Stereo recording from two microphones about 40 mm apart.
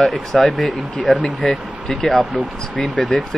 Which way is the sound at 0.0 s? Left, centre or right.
Centre.